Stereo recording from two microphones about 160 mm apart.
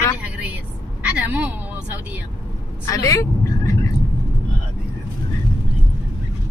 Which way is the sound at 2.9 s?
20° left (ahead or behind).